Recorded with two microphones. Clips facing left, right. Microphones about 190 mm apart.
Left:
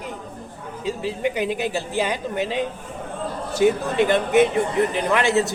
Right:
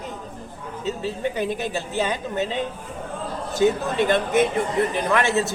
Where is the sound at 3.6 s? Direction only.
15° left (ahead or behind).